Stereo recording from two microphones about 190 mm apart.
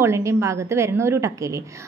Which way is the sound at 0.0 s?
15° right (ahead or behind).